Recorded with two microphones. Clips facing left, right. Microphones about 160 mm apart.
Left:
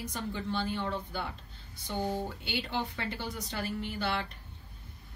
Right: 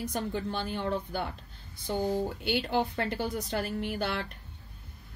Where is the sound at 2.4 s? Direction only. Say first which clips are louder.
Right 6 dB; 50° right (ahead or behind).